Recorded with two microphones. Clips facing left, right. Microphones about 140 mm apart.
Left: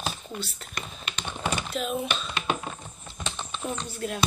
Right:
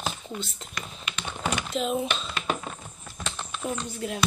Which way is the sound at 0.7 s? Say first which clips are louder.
Even; 35° left (ahead or behind).